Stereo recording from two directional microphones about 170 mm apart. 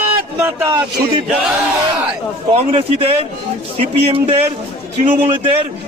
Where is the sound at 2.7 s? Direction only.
35° right (ahead or behind).